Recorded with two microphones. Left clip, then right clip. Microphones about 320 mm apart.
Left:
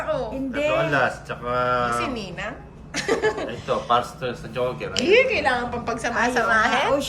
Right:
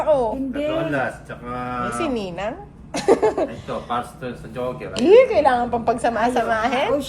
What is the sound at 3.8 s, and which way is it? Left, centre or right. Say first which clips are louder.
Speech: left 5 dB; left.